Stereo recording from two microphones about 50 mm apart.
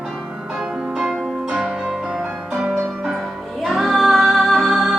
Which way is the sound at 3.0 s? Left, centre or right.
Centre.